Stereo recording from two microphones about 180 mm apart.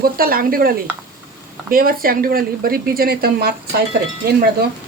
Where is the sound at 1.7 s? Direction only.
55° right (ahead or behind).